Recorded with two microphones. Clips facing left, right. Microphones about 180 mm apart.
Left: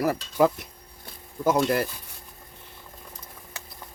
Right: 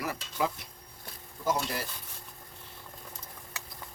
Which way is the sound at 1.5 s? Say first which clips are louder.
Left 11 dB; 60° left (ahead or behind).